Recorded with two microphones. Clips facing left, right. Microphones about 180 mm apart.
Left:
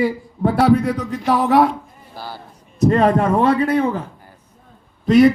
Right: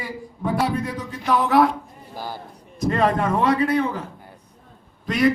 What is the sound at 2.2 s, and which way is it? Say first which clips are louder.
Speech: right 1 dB; 15° right (ahead or behind).